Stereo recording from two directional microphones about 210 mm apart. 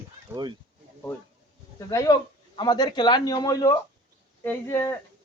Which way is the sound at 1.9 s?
15° left (ahead or behind).